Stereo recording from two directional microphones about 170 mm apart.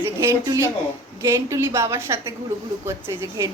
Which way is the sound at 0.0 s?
15° right (ahead or behind).